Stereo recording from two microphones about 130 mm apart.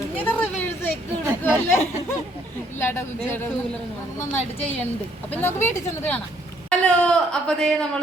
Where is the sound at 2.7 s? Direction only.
20° left (ahead or behind).